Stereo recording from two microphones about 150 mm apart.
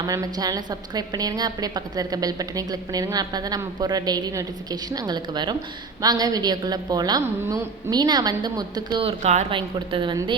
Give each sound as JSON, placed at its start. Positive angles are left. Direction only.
{"t": 0.0, "sound": "a woman's voice", "side_deg": -25}
{"t": 9.5, "sound": "a woman's voice", "side_deg": -35}